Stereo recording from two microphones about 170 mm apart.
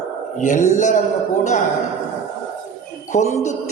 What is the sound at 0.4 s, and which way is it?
Speech, 45° left (ahead or behind).